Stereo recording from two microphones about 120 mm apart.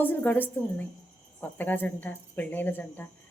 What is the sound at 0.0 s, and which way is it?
Speech, 15° left (ahead or behind).